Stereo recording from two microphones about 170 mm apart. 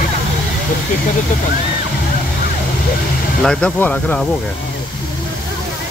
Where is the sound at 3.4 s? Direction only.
5° left (ahead or behind).